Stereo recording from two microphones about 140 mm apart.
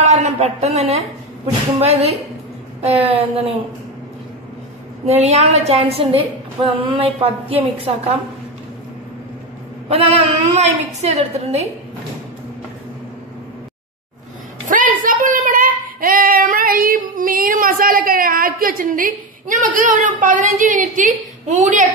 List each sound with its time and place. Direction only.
0.0 s a woman's voice: 55° right (ahead or behind)
5.0 s a woman's voice: 50° right (ahead or behind)
9.8 s a woman's voice: 45° right (ahead or behind)
14.7 s a sound: 75° right (ahead or behind)